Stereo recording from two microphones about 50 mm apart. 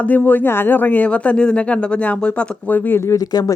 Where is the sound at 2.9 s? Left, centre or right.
Left.